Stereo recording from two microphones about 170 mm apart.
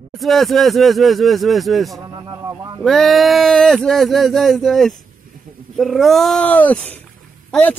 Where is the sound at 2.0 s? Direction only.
25° right (ahead or behind).